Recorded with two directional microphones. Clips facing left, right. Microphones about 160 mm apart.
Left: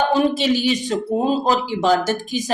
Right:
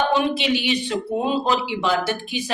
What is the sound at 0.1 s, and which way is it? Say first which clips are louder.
Speech: left 3 dB; 40° left (ahead or behind).